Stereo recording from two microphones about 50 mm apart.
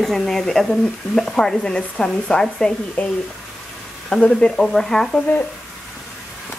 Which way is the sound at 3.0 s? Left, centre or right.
Left.